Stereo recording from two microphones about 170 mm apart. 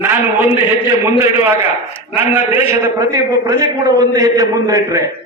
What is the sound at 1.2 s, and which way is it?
A man's voice, 15° right (ahead or behind).